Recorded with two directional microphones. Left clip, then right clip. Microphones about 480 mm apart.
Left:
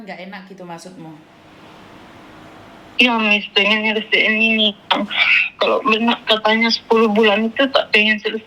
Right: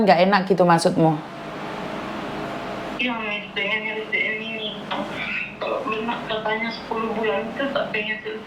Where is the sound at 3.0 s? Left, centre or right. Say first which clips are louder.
Left 13 dB; left.